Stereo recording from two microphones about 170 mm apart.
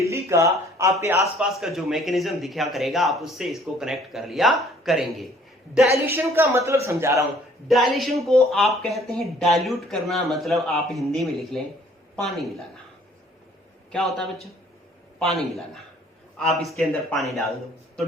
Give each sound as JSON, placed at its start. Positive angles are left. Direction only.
{"t": 0.0, "sound": "speech", "side_deg": -15}
{"t": 1.4, "sound": "speech", "side_deg": 0}
{"t": 6.1, "sound": "speech", "side_deg": -15}
{"t": 7.7, "sound": "speech", "side_deg": 0}
{"t": 13.9, "sound": "speech", "side_deg": 0}